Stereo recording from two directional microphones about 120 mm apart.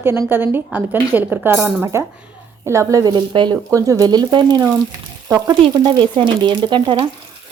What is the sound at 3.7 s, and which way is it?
Speech, 30° right (ahead or behind).